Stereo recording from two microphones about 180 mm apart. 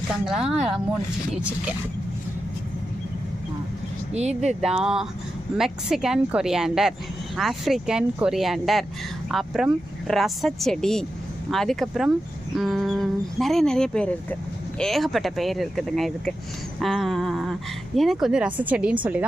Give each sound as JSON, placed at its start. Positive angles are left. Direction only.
{"t": 0.1, "sound": "speech", "side_deg": 0}
{"t": 4.1, "sound": "speech", "side_deg": -40}
{"t": 4.4, "sound": "speech", "side_deg": -5}